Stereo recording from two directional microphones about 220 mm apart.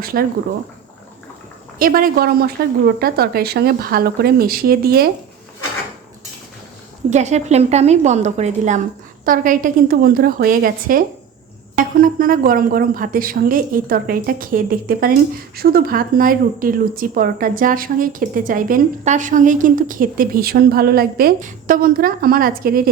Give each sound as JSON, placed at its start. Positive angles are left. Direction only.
{"t": 0.0, "sound": "speech", "side_deg": -40}
{"t": 1.8, "sound": "speech", "side_deg": -40}
{"t": 7.1, "sound": "a woman's voice", "side_deg": -30}